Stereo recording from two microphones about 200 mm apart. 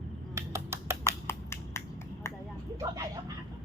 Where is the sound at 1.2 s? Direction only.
10° left (ahead or behind).